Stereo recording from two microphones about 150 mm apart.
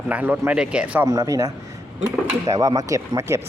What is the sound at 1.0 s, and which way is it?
A man's voice, 25° right (ahead or behind).